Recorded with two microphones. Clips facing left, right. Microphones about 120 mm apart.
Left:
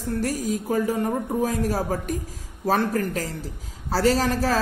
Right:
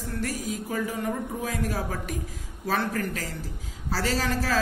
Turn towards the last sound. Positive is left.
turn(degrees=45)  # may be behind; listen again after turning